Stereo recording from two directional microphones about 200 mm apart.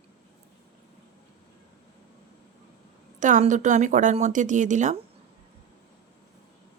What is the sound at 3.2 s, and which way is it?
Speech, 40° right (ahead or behind).